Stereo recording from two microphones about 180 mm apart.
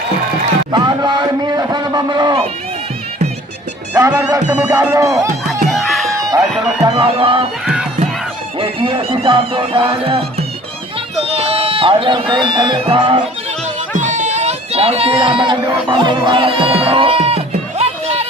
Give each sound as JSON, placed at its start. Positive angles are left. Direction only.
{"t": 0.7, "sound": "a sound", "side_deg": -25}
{"t": 3.9, "sound": "speech", "side_deg": -20}
{"t": 5.6, "sound": "music", "side_deg": 0}
{"t": 6.8, "sound": "speech", "side_deg": -25}
{"t": 8.5, "sound": "music", "side_deg": -30}
{"t": 11.2, "sound": "speech", "side_deg": -35}
{"t": 13.9, "sound": "a sound", "side_deg": -45}
{"t": 15.6, "sound": "speech", "side_deg": -25}